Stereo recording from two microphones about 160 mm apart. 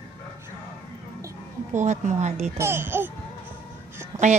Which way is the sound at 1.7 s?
50° right (ahead or behind).